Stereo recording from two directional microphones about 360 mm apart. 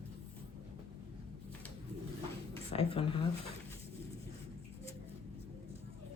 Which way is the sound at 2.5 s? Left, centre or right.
Centre.